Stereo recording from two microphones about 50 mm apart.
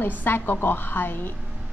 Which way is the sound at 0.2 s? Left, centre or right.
Left.